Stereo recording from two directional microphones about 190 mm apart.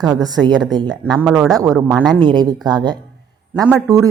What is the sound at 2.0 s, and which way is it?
A woman's voice, 25° right (ahead or behind).